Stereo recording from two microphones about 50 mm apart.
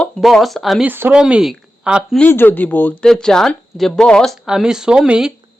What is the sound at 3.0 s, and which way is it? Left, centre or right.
Speech, centre.